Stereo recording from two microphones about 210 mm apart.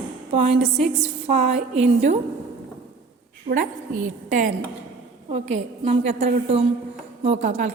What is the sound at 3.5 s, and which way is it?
Speech, 40° right (ahead or behind).